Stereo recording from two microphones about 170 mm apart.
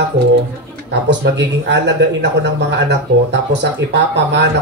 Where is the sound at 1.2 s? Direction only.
90° right.